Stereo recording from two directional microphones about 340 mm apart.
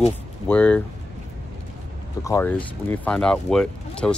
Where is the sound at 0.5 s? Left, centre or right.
Centre.